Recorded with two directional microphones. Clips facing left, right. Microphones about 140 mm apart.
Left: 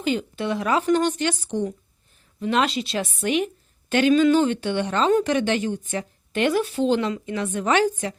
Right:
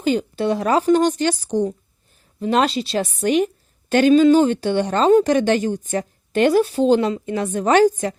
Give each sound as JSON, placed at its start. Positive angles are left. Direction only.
{"t": 0.0, "sound": "a woman's voice", "side_deg": -40}